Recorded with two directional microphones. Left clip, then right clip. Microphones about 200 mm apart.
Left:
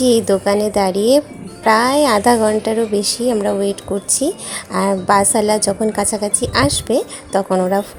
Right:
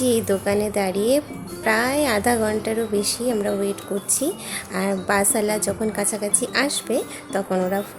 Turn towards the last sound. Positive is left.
turn(degrees=20)  # may be behind; listen again after turning